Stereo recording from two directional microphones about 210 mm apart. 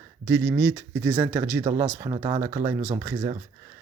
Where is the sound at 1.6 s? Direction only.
20° right (ahead or behind).